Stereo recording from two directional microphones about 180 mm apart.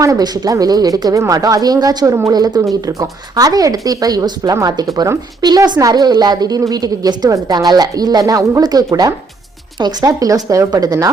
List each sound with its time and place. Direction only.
0.0 s speech: 20° right (ahead or behind)